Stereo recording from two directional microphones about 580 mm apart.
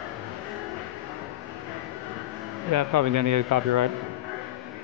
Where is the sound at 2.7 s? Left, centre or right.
Right.